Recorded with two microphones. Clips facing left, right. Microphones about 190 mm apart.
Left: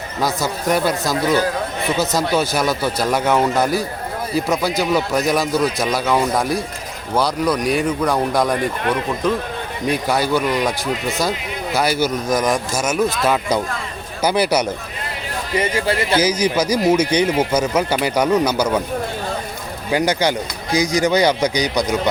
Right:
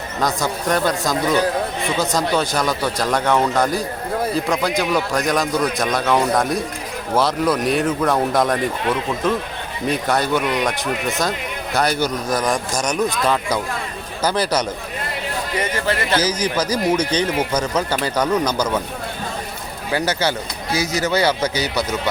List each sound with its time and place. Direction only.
0.2 s a man's voice: 5° left (ahead or behind)
9.8 s a man's voice: centre (ahead or behind)
15.7 s a man's voice: 10° left (ahead or behind)
19.9 s a man's voice: 15° left (ahead or behind)